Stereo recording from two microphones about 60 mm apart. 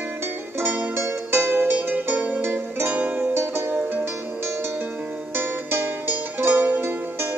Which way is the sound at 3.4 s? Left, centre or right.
Right.